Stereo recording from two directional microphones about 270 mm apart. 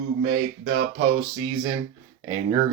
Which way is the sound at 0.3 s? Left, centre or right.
Right.